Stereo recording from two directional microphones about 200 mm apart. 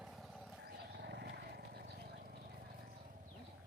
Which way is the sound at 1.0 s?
60° right (ahead or behind).